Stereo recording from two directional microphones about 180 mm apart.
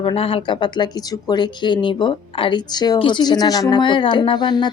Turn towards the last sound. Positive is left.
turn(degrees=25)  # may be behind; listen again after turning